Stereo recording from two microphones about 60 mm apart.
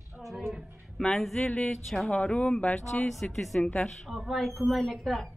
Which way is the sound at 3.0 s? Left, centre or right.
Centre.